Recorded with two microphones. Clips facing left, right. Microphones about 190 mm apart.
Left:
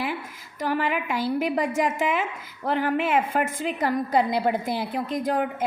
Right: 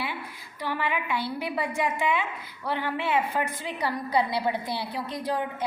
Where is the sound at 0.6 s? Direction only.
45° left (ahead or behind).